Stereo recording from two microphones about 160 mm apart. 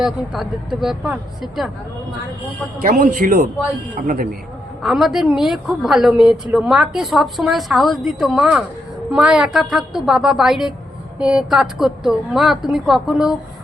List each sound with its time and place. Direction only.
0.0 s a woman's voice: centre (ahead or behind)
2.8 s speech: 55° right (ahead or behind)
4.8 s a woman's voice: centre (ahead or behind)